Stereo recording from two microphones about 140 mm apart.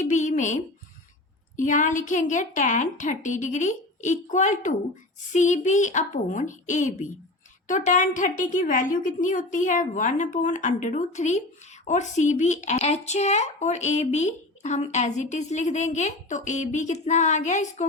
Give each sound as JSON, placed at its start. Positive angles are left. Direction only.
{"t": 0.0, "sound": "a woman's voice", "side_deg": 60}